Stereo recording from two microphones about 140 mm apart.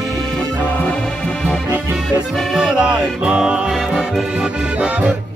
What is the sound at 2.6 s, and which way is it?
Music, 5° right (ahead or behind).